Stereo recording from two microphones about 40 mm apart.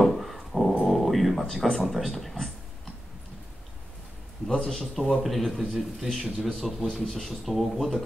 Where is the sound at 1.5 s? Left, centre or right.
Centre.